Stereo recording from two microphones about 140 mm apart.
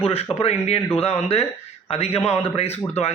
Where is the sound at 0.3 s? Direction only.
45° left (ahead or behind).